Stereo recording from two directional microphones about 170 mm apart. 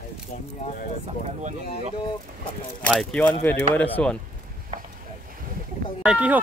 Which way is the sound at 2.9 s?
5° left (ahead or behind).